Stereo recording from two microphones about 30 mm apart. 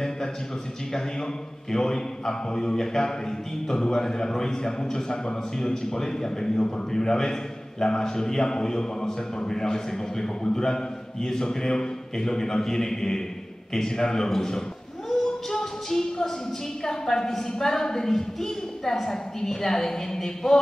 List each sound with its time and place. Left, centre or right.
0.9 s speech: centre
15.5 s a sound: centre
16.8 s a woman's voice: centre